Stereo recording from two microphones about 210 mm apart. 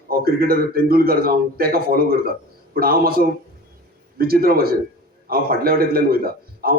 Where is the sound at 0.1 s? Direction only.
45° right (ahead or behind).